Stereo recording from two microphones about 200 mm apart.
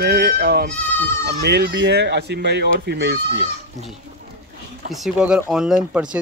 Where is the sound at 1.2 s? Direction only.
55° right (ahead or behind).